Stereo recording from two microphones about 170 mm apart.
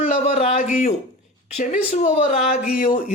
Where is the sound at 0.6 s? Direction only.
50° left (ahead or behind).